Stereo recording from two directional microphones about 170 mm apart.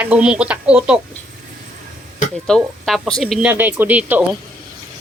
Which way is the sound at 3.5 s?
10° right (ahead or behind).